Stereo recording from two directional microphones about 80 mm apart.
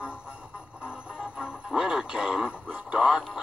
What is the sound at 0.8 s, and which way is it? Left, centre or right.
Music, centre.